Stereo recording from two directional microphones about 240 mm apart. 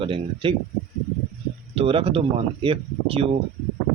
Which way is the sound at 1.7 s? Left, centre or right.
Right.